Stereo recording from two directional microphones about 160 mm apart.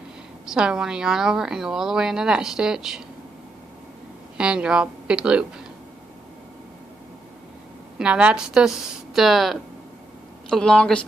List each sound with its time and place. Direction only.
0.5 s a woman's voice: 5° right (ahead or behind)
4.4 s a woman's voice: 5° right (ahead or behind)
8.0 s a woman's voice: 5° right (ahead or behind)